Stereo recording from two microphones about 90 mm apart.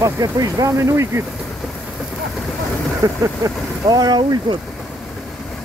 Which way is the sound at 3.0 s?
45° right (ahead or behind).